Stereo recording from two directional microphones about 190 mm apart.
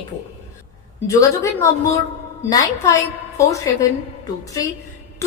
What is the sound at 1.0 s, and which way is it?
A woman's voice, 15° left (ahead or behind).